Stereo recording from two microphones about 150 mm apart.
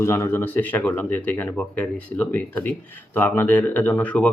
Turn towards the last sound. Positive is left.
turn(degrees=10)  # may be behind; listen again after turning